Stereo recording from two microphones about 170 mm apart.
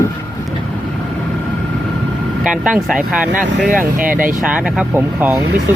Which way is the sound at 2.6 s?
Centre (ahead or behind).